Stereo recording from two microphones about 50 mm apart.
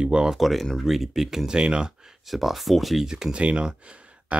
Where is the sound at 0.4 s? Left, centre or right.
Centre.